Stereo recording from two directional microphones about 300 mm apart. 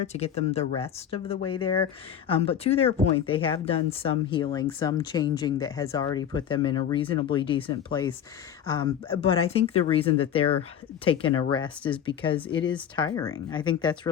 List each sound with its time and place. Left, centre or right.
0.1 s speech: left